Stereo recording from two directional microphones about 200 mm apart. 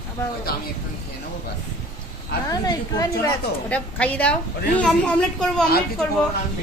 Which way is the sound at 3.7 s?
5° left (ahead or behind).